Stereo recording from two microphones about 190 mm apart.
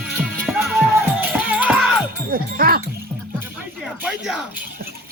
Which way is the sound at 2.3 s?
50° right (ahead or behind).